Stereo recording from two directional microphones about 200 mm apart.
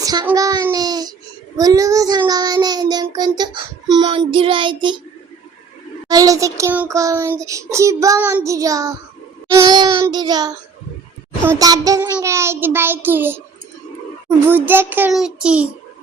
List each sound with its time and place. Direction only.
0.0 s a child's voice: 20° right (ahead or behind)
0.3 s child singing: 15° right (ahead or behind)
6.1 s child singing: 15° right (ahead or behind)